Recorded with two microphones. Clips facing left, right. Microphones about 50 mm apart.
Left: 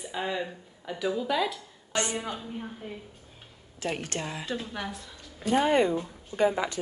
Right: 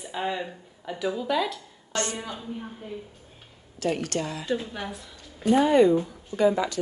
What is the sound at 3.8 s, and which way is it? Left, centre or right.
Speech, left.